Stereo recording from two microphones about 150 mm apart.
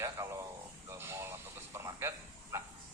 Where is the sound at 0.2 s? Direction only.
20° right (ahead or behind).